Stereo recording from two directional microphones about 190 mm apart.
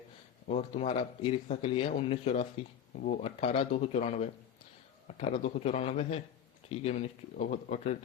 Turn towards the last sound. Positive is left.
turn(degrees=35)  # may be behind; listen again after turning